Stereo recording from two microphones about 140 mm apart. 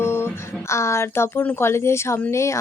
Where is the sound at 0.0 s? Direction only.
15° left (ahead or behind).